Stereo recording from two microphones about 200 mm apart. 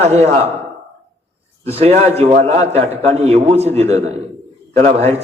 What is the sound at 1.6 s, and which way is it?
A man's voice, 30° right (ahead or behind).